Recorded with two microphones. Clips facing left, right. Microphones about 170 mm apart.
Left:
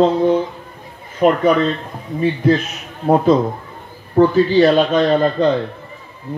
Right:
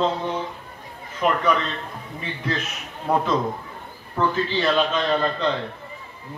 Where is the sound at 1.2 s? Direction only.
45° left (ahead or behind).